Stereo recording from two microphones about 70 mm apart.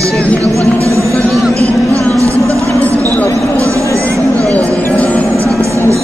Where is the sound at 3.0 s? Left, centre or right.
Left.